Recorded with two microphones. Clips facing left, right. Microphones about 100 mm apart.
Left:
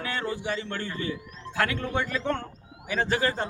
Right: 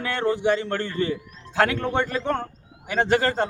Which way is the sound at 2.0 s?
50° right (ahead or behind).